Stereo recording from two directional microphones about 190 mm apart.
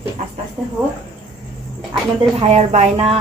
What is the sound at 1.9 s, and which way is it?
Speech, 35° right (ahead or behind).